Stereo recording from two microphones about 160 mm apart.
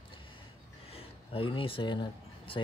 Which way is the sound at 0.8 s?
35° left (ahead or behind).